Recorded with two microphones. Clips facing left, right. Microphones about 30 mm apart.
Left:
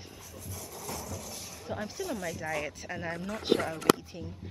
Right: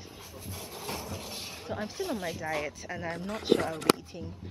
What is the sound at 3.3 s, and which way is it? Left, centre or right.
Speech, right.